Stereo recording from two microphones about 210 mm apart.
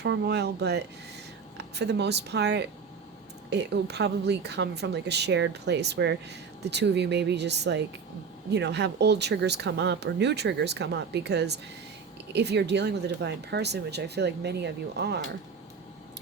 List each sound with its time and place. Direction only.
0.0 s speech: 55° right (ahead or behind)